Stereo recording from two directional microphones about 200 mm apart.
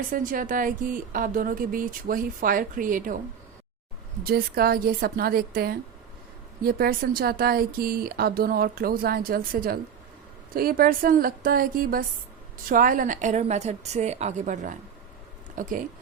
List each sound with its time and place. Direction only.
0.1 s speech: 45° right (ahead or behind)
4.2 s a woman's voice: 50° right (ahead or behind)